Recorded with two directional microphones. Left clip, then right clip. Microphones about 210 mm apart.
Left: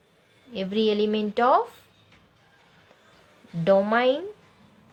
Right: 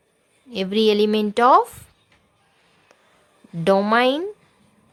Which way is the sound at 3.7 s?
40° right (ahead or behind).